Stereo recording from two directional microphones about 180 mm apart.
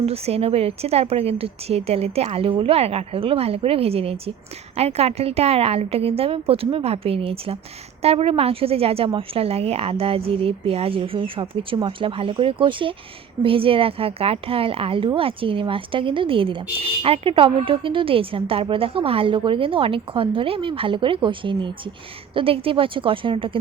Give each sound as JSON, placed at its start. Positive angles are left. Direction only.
{"t": 0.0, "sound": "a woman's voice", "side_deg": -35}